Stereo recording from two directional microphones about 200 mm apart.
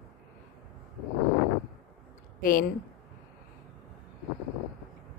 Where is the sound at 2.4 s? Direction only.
45° left (ahead or behind).